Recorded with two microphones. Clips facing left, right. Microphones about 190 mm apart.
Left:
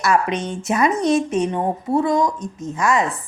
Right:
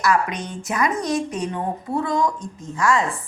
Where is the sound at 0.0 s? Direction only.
25° left (ahead or behind).